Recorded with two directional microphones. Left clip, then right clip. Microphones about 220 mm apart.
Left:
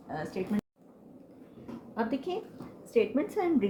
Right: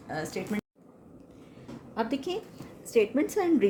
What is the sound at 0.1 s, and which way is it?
Speech, 50° right (ahead or behind).